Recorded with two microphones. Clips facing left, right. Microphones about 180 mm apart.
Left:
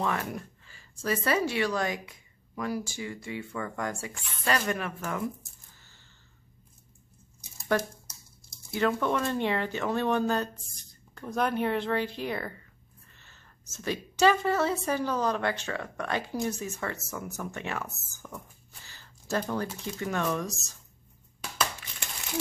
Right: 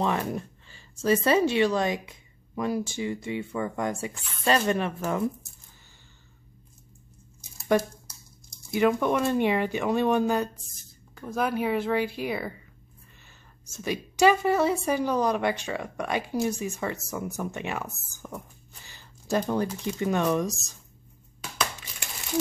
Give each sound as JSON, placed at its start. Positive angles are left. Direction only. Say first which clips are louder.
{"t": 0.0, "sound": "speech", "louder": "right 4 dB", "side_deg": -20}
{"t": 7.7, "sound": "speech", "louder": "right 4 dB", "side_deg": -15}
{"t": 18.9, "sound": "a sound", "louder": "right 4 dB", "side_deg": -15}
{"t": 19.8, "sound": "speech", "louder": "right 5 dB", "side_deg": -20}